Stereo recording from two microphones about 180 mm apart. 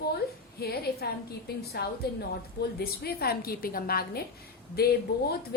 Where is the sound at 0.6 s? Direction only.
60° left (ahead or behind).